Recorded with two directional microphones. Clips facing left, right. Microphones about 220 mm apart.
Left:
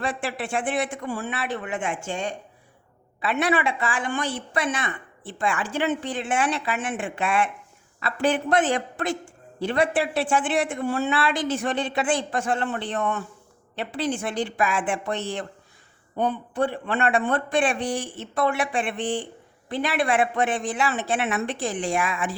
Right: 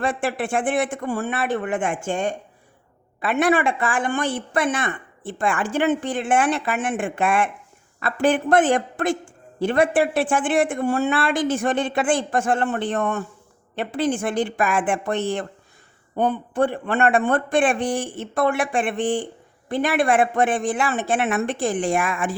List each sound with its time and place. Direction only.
0.0 s a man's voice: 50° right (ahead or behind)